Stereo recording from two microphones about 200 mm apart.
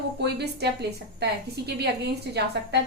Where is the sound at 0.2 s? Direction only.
55° right (ahead or behind).